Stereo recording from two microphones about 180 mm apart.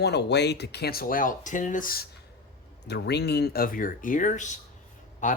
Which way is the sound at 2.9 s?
70° left (ahead or behind).